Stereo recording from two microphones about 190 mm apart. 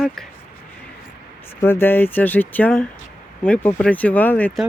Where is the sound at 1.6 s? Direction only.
10° left (ahead or behind).